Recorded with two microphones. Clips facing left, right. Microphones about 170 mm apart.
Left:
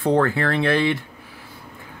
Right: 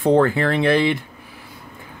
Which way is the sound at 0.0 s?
15° right (ahead or behind).